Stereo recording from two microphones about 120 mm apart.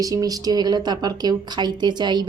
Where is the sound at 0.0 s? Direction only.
30° right (ahead or behind).